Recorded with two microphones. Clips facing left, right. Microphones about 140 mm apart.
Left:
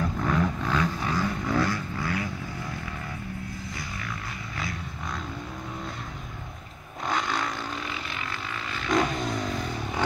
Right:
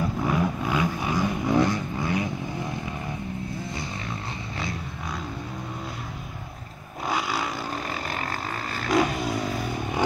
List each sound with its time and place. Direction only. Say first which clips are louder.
0.0 s vehicle: right 1 dB; 10° right (ahead or behind)
7.1 s vehicle: right 1 dB; 5° right (ahead or behind)
7.7 s vehicle: right 4 dB; 40° right (ahead or behind)
8.9 s vehicle: right 2 dB; 5° right (ahead or behind)